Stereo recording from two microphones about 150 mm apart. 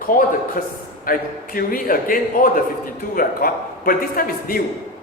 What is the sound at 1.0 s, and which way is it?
A man's voice, 70° left (ahead or behind).